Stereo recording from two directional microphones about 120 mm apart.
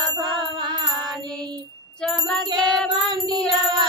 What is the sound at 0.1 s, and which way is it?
Music, 40° right (ahead or behind).